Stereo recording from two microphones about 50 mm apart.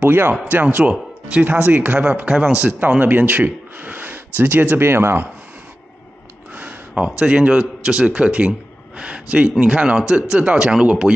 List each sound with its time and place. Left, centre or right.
0.0 s speech: right
4.8 s speech: right
6.5 s a sound: right
7.0 s a man's voice: right